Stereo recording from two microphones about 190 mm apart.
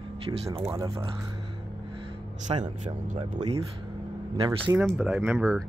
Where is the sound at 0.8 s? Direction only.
30° right (ahead or behind).